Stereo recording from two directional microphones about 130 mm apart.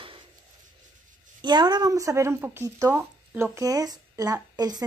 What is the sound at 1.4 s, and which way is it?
Speech, 35° right (ahead or behind).